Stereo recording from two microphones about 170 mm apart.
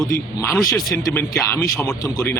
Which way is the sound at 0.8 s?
20° left (ahead or behind).